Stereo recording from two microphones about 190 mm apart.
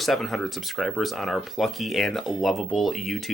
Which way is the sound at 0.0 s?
Centre (ahead or behind).